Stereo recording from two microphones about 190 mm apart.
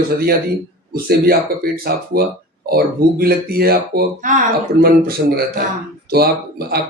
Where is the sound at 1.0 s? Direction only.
55° right (ahead or behind).